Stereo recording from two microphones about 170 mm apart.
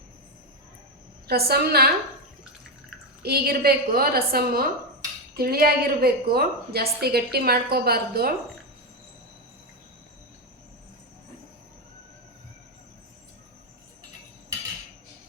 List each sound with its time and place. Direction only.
1.3 s a woman's voice: 65° right (ahead or behind)
3.2 s a woman's voice: 65° right (ahead or behind)